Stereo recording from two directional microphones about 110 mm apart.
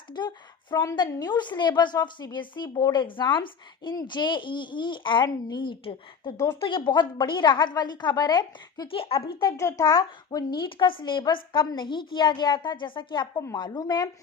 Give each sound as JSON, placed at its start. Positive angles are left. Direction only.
{"t": 0.1, "sound": "a woman's voice", "side_deg": 40}
{"t": 6.3, "sound": "speech", "side_deg": 25}
{"t": 6.6, "sound": "a woman's voice", "side_deg": 45}
{"t": 9.0, "sound": "a child's voice", "side_deg": 60}
{"t": 9.6, "sound": "a woman's voice", "side_deg": 30}